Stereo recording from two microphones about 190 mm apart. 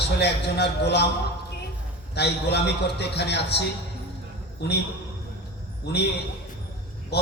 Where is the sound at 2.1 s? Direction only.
60° left (ahead or behind).